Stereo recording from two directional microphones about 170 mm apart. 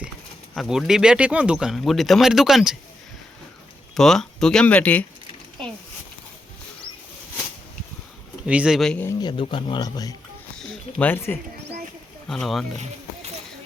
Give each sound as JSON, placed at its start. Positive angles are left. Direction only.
{"t": 0.5, "sound": "speech", "side_deg": 0}
{"t": 3.9, "sound": "speech", "side_deg": 0}
{"t": 8.4, "sound": "speech", "side_deg": -5}
{"t": 9.4, "sound": "speech", "side_deg": 30}
{"t": 10.9, "sound": "speech", "side_deg": 10}
{"t": 12.3, "sound": "speech", "side_deg": 0}
{"t": 12.7, "sound": "a sound", "side_deg": -40}